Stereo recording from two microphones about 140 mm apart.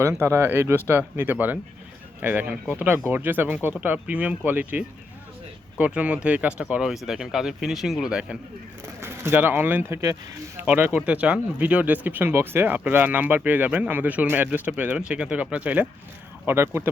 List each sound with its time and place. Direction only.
0.0 s speech: 20° right (ahead or behind); by 8.4 s 5° right (ahead or behind)
9.0 s speech: 15° right (ahead or behind)
10.6 s speech: 10° right (ahead or behind)